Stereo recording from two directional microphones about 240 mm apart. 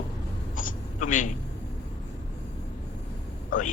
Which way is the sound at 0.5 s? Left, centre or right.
Left.